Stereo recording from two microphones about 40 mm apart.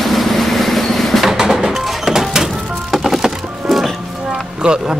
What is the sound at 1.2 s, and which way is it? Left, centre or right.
Music, centre.